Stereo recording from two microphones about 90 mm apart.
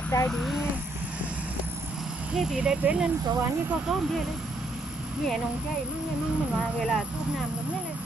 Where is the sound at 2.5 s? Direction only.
10° right (ahead or behind).